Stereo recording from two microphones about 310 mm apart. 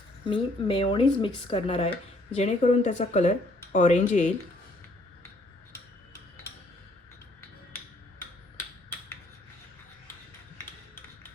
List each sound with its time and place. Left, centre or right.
0.3 s speech: centre